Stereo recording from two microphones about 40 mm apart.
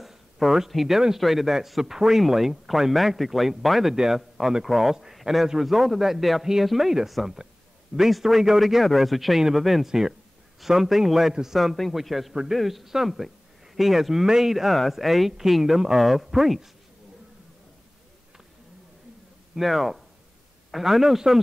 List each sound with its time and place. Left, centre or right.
0.0 s a sound: centre
1.1 s speech: centre
3.9 s speech: centre
9.8 s speech: centre
19.5 s speech: centre